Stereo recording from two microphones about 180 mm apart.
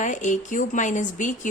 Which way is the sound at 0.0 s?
45° left (ahead or behind).